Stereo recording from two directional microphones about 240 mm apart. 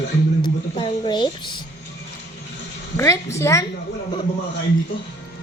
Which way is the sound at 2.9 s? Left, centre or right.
Centre.